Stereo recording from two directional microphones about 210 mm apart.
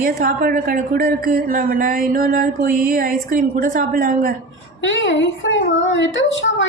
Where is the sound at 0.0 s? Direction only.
40° right (ahead or behind).